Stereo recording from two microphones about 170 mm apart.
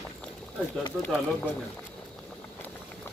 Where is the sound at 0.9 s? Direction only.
Centre (ahead or behind).